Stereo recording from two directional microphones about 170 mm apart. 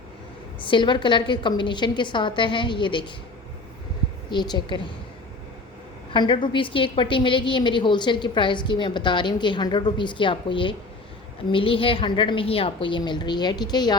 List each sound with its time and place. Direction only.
0.6 s a woman's voice: 30° left (ahead or behind)
4.3 s a woman's voice: 25° left (ahead or behind)
6.1 s a woman's voice: 30° left (ahead or behind)